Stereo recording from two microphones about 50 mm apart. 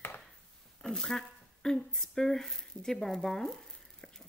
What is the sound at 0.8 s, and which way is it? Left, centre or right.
Speech, centre.